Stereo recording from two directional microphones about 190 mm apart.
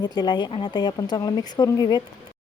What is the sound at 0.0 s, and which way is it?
A woman's voice, 20° left (ahead or behind).